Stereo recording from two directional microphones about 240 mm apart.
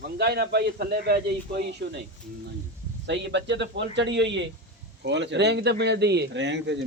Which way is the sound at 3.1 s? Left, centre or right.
Right.